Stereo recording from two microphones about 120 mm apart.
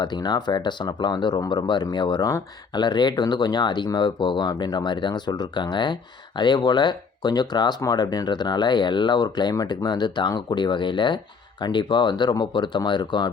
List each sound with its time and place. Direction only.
0.0 s speech: 40° left (ahead or behind)